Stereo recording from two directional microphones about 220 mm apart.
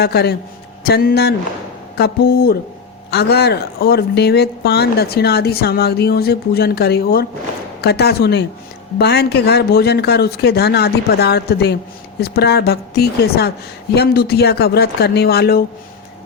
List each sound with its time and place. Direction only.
0.0 s speech: 45° left (ahead or behind)